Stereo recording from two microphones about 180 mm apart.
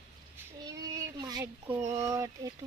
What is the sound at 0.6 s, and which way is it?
Speech, 20° right (ahead or behind).